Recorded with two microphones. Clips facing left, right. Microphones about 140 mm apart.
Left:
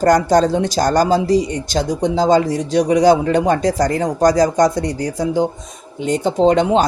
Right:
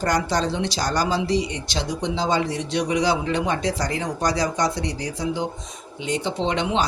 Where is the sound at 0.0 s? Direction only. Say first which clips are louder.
Left 10 dB; 45° left (ahead or behind).